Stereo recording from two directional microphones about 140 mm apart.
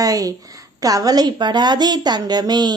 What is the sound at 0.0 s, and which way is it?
A woman's voice, 25° right (ahead or behind).